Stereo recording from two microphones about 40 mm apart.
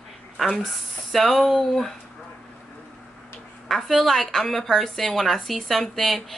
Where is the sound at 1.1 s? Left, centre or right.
Centre.